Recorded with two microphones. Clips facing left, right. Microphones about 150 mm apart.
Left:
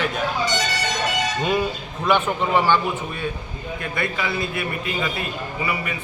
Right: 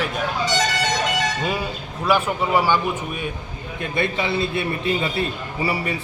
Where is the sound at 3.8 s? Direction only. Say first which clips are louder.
Right 4 dB; 25° right (ahead or behind).